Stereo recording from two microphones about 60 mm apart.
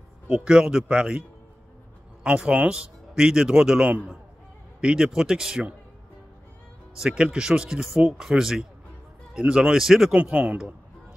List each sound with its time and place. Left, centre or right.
0.3 s speech: centre
2.4 s speech: centre
7.0 s speech: centre
10.1 s speech: centre